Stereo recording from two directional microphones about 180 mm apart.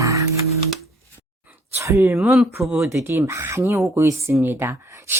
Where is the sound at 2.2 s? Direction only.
Centre (ahead or behind).